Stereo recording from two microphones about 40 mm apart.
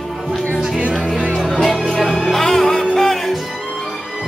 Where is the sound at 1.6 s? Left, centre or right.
Centre.